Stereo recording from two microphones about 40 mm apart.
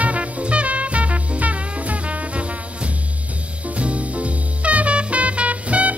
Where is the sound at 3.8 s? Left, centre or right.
Right.